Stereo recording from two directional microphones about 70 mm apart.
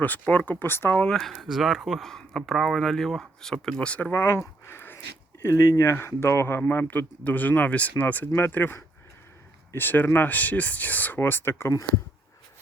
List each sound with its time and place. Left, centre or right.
0.0 s speech: left
1.0 s speech: centre
4.1 s speech: left